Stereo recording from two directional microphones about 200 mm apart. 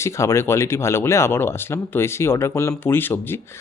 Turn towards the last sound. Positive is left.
turn(degrees=10)  # may be behind; listen again after turning